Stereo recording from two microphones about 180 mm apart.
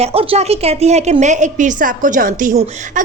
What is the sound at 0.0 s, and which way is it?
A woman's voice, 35° right (ahead or behind).